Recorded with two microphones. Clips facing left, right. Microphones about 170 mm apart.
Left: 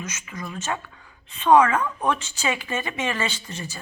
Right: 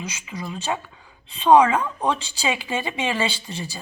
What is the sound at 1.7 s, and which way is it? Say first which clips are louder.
Speech: right 1 dB; 30° right (ahead or behind).